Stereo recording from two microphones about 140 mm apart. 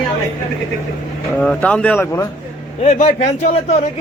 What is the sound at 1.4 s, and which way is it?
Speech, 5° left (ahead or behind).